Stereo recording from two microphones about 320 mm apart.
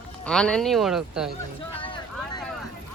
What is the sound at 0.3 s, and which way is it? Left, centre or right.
Speech, centre.